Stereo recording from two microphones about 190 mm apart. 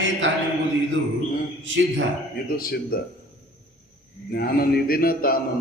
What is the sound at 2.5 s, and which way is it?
Speech, 50° left (ahead or behind).